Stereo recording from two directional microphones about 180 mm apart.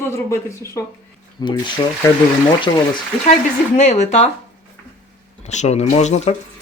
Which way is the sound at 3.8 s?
40° left (ahead or behind).